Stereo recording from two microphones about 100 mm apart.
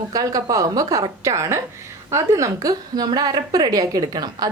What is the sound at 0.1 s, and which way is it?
A woman's voice, 40° right (ahead or behind).